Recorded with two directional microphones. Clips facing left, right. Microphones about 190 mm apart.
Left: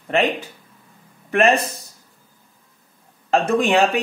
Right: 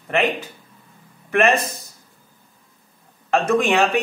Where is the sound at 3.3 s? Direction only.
30° left (ahead or behind).